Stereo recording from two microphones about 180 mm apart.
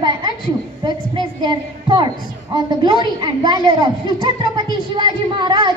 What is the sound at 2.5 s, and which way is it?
A woman's voice, 25° right (ahead or behind).